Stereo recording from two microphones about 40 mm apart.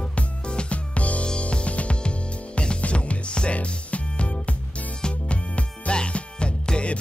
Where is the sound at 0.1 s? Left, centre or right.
Left.